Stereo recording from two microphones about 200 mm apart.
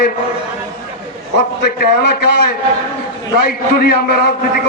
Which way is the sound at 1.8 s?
55° left (ahead or behind).